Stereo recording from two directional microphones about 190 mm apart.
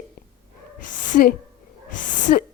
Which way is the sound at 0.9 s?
45° left (ahead or behind).